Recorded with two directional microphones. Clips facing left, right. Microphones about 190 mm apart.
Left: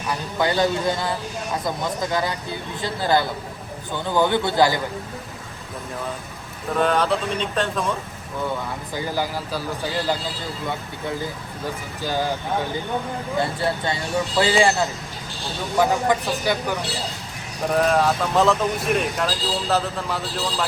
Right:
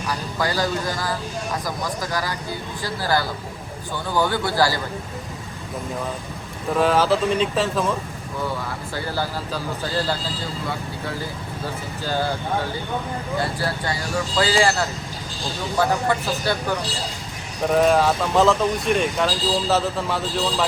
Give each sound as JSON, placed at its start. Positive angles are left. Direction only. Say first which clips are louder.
{"t": 0.1, "sound": "speech", "louder": "left 3 dB", "side_deg": 25}
{"t": 6.7, "sound": "speech", "louder": "right 2 dB", "side_deg": 0}
{"t": 9.0, "sound": "speech", "louder": "left 1 dB", "side_deg": 15}
{"t": 13.3, "sound": "speech", "louder": "left 2 dB", "side_deg": 20}
{"t": 17.7, "sound": "speech", "louder": "right 2 dB", "side_deg": 0}